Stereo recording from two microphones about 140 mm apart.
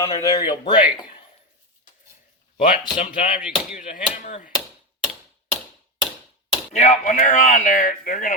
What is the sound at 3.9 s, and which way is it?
Speech, 65° left (ahead or behind).